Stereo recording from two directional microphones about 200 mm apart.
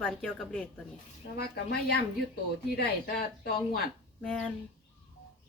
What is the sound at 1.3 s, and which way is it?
Speech, 55° left (ahead or behind).